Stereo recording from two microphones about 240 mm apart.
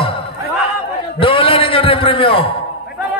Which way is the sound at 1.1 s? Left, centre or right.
Left.